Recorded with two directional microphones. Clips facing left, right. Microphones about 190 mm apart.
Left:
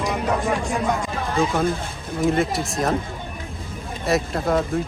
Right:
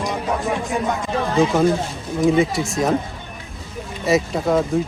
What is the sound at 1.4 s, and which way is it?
Speech, centre (ahead or behind).